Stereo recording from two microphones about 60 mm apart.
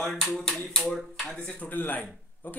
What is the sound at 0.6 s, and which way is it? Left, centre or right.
Speech, centre.